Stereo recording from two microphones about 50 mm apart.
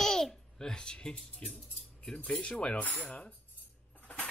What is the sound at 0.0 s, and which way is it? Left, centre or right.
Babbling, centre.